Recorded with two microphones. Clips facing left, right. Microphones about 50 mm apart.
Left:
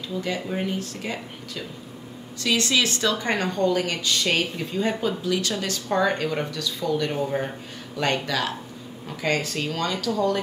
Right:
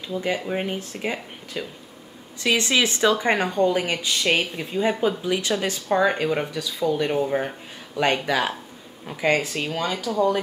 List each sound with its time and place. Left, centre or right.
0.1 s a woman's voice: right